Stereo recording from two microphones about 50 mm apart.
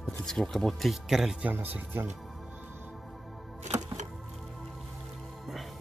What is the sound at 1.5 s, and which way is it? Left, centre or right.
Speech, right.